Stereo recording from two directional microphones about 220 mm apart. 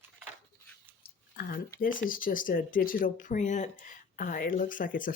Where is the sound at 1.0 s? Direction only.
40° left (ahead or behind).